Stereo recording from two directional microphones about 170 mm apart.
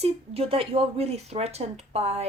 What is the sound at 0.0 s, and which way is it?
Speech, 35° right (ahead or behind).